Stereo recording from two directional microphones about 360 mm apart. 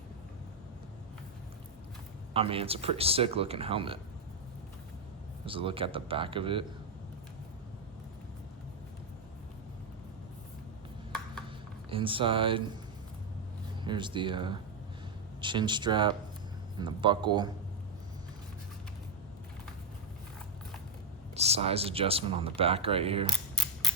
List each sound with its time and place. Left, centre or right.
2.3 s speech: centre
5.5 s speech: centre
11.9 s speech: centre
13.8 s speech: centre
21.3 s speech: centre